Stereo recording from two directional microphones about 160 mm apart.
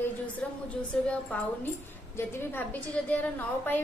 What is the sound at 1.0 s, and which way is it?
A woman's voice, 10° left (ahead or behind).